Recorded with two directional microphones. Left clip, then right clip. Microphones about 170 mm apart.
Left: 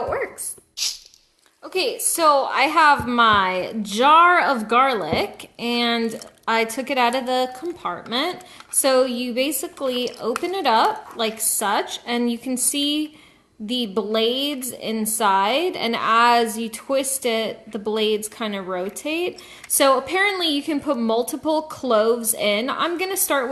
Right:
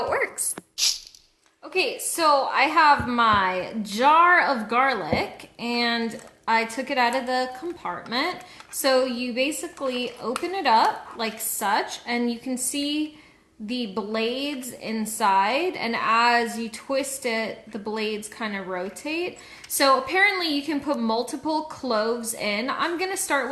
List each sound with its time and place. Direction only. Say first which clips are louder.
1.7 s a woman's voice: left 2 dB; 35° left (ahead or behind)